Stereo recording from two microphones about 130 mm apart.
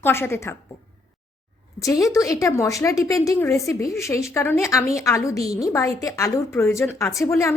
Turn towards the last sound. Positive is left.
turn(degrees=20)  # may be behind; listen again after turning